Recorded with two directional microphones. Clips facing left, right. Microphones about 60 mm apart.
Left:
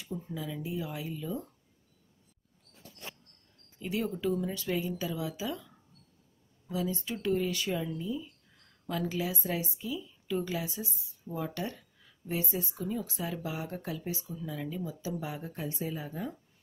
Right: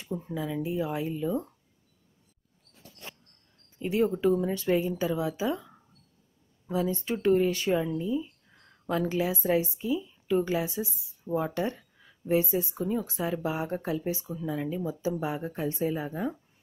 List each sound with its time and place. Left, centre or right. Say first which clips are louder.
0.0 s speech: right 5 dB; right
3.8 s speech: right 7 dB; right
6.7 s speech: right 5 dB; right